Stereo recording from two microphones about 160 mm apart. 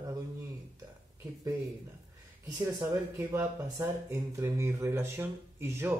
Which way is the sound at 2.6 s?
20° right (ahead or behind).